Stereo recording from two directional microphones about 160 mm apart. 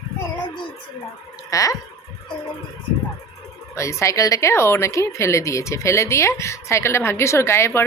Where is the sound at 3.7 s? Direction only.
20° left (ahead or behind).